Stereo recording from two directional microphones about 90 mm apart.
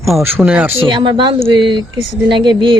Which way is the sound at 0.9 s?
65° right (ahead or behind).